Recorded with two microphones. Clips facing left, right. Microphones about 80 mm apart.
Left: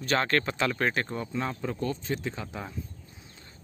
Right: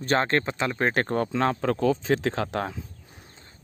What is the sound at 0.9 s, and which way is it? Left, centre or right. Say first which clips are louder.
Speech: right 6 dB; right.